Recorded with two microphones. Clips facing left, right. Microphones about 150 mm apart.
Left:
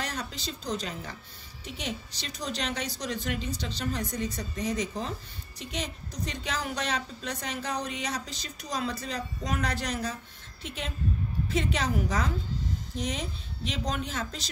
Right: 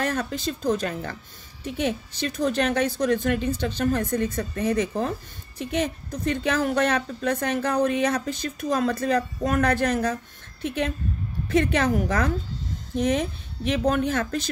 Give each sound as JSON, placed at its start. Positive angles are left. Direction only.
{"t": 0.0, "sound": "a woman's voice", "side_deg": -55}